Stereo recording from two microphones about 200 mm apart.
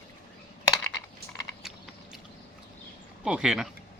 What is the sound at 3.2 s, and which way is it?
Speech, 5° right (ahead or behind).